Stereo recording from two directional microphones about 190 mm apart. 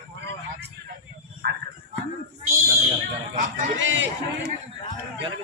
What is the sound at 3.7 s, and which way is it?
Speech, 75° right (ahead or behind).